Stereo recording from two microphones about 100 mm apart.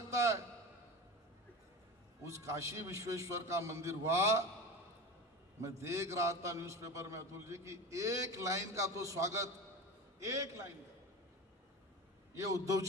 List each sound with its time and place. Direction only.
0.1 s a sound: 30° right (ahead or behind)
2.2 s a man's voice: 30° right (ahead or behind)
5.6 s a man's voice: 30° right (ahead or behind)
12.4 s a man's voice: 35° right (ahead or behind)